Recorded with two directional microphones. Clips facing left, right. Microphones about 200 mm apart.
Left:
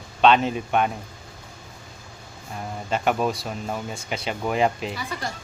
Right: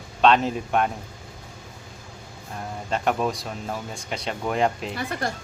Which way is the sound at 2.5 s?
5° left (ahead or behind).